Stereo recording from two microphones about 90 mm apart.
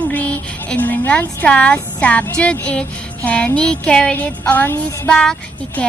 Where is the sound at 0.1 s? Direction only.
20° left (ahead or behind).